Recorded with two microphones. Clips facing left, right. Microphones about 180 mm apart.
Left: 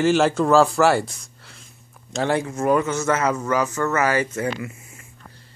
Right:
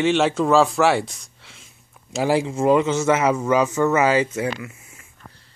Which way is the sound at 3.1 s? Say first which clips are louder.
Right 3 dB; 10° right (ahead or behind).